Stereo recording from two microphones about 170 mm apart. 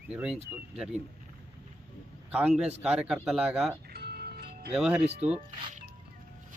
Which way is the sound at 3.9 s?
65° right (ahead or behind).